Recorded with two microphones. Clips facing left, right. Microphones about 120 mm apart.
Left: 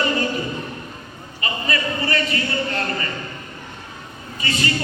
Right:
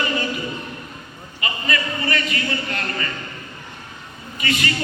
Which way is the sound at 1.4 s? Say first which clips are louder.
Left 1 dB; 35° left (ahead or behind).